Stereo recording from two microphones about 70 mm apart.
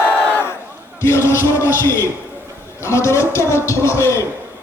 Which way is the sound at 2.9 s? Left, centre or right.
Left.